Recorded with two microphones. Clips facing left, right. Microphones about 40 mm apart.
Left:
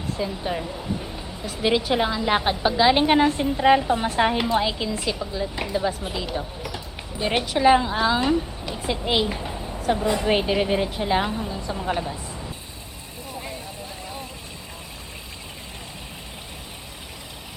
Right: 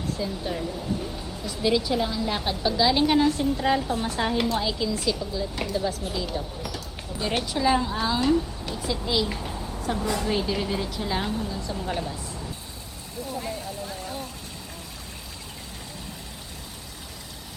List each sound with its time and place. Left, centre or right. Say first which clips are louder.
0.2 s a woman's voice: left 2 dB; left
1.9 s a woman's voice: left 4 dB; left
2.3 s a woman's voice: left 5 dB; left
7.4 s speech: left 7 dB; left
7.9 s a woman's voice: left 5 dB; left
8.2 s speech: even; left
9.3 s a woman's voice: left 2 dB; left
10.2 s a woman's voice: left 5 dB; left